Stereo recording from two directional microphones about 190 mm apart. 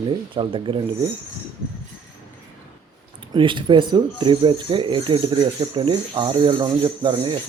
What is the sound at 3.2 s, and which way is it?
Speech, 25° right (ahead or behind).